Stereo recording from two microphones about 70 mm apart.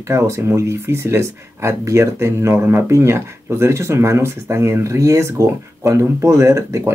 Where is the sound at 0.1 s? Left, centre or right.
Right.